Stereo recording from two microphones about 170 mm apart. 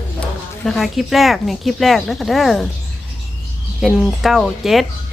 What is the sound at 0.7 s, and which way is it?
Speech, centre (ahead or behind).